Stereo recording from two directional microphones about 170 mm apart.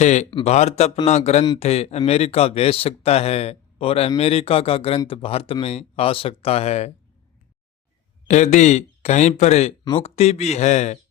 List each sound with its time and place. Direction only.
0.0 s speech: 40° left (ahead or behind)
8.3 s speech: 45° left (ahead or behind)